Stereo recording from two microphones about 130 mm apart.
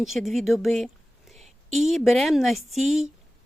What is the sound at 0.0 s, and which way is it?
A woman's voice, centre (ahead or behind).